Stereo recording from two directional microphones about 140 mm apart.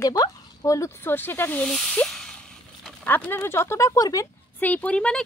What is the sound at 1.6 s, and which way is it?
Speech, 5° left (ahead or behind).